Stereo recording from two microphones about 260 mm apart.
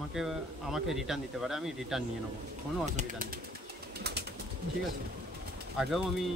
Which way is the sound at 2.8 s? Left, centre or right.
Right.